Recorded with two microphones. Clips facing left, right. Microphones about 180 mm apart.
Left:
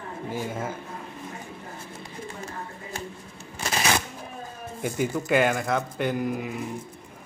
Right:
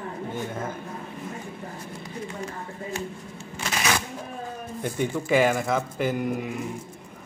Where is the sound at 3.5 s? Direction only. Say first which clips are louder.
Left 1 dB; 35° left (ahead or behind).